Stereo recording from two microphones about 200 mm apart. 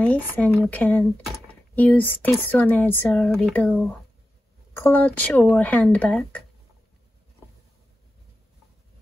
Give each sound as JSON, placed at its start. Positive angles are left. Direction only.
{"t": 0.0, "sound": "speech", "side_deg": 5}